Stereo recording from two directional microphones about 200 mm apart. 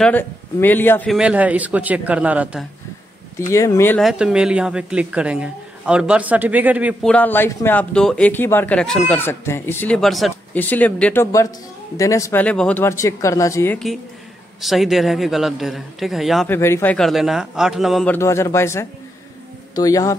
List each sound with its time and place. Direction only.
0.0 s a man's voice: 10° left (ahead or behind)
1.1 s speech: 5° right (ahead or behind)
3.3 s a man's voice: 15° left (ahead or behind)
4.0 s a woman's voice: 5° right (ahead or behind)
7.1 s a man's voice: 10° left (ahead or behind)
14.6 s a woman's voice: centre (ahead or behind)
16.4 s a woman's voice: 10° left (ahead or behind)
18.1 s a man's voice: 15° left (ahead or behind)